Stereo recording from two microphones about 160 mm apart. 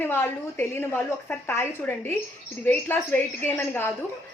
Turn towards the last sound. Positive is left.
turn(degrees=15)  # may be behind; listen again after turning